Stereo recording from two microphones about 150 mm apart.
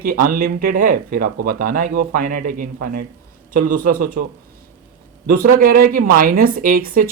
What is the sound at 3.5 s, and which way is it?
Speech, 60° right (ahead or behind).